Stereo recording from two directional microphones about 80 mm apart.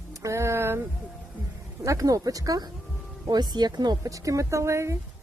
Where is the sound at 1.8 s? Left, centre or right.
Right.